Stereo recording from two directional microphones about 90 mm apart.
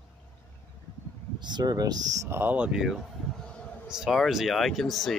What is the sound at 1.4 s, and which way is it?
Speech, 55° right (ahead or behind).